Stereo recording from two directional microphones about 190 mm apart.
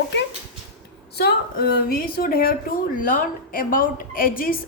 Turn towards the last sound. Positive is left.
turn(degrees=50)  # may be behind; listen again after turning